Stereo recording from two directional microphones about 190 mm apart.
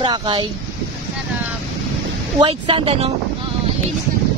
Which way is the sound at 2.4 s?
25° right (ahead or behind).